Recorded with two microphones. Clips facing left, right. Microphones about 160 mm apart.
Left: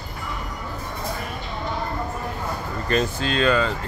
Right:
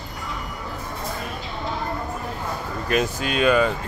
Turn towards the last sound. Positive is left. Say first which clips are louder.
# right 2 dB
turn(degrees=-15)  # may be behind; listen again after turning